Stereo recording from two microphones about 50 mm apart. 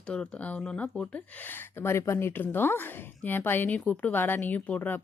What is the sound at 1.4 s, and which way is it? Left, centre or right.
Speech, left.